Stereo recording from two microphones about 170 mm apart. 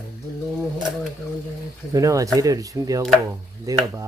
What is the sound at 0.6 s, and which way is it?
Typewriter, centre (ahead or behind).